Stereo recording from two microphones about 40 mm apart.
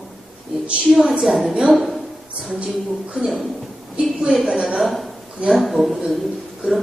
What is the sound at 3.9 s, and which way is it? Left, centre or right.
Speech, right.